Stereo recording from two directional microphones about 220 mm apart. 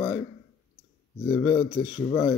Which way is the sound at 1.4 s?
15° left (ahead or behind).